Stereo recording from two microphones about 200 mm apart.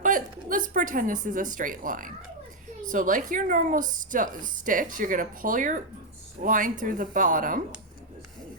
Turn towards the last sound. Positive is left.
turn(degrees=-40)  # may be behind; listen again after turning